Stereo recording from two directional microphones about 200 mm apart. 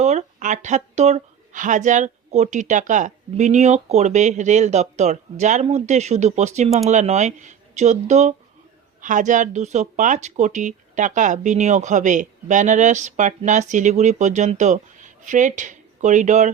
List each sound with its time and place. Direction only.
0.0 s speech: 35° right (ahead or behind)